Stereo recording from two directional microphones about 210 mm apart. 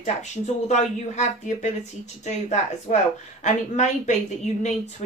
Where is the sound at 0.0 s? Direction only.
35° left (ahead or behind).